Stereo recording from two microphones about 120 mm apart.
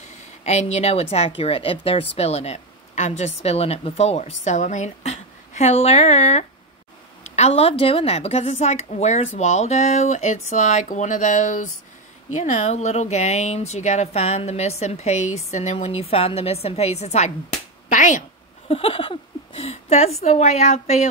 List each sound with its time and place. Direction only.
0.4 s a woman's voice: 70° left (ahead or behind); by 11.7 s 90° left
12.4 s a woman's voice: 70° left (ahead or behind); by 18.2 s 90° left
18.7 s a woman's voice: 50° left (ahead or behind)